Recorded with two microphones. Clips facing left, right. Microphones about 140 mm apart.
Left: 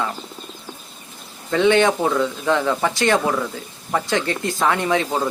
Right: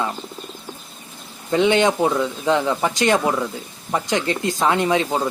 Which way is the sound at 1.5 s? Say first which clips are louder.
Left 1 dB; 15° right (ahead or behind).